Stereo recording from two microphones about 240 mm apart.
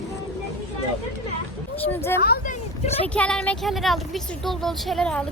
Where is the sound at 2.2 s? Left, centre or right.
Left.